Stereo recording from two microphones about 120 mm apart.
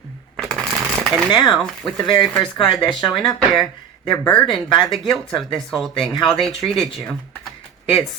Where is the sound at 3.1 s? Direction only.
Centre (ahead or behind).